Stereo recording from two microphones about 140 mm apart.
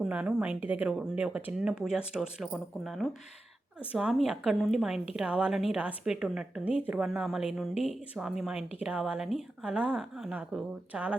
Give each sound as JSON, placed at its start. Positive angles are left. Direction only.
{"t": 0.0, "sound": "a woman's voice", "side_deg": -5}